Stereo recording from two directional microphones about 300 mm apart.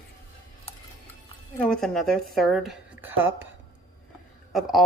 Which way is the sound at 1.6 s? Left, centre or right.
Centre.